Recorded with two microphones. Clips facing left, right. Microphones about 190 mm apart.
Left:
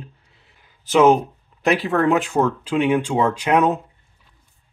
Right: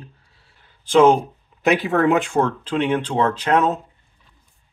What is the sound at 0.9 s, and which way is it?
Speech, 5° left (ahead or behind).